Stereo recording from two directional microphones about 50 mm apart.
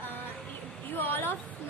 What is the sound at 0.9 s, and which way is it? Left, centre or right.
Speech, left.